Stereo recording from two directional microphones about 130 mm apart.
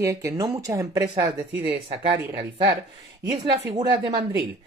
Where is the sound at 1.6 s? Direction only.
40° right (ahead or behind).